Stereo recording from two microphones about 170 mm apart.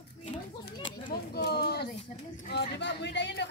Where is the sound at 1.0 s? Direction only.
70° left (ahead or behind).